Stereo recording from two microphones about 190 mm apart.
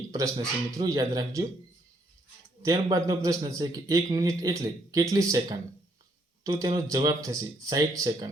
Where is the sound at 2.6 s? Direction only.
20° right (ahead or behind).